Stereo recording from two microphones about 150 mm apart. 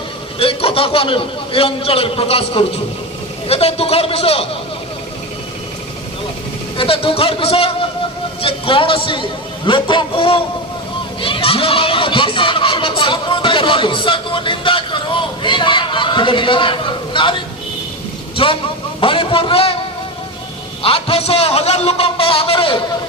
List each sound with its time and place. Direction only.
0.3 s a man's voice: 40° left (ahead or behind)
6.7 s a man's voice: 40° left (ahead or behind)
20.8 s a man's voice: 40° left (ahead or behind)